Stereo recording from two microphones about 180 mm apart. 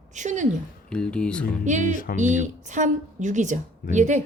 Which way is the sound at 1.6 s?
45° right (ahead or behind).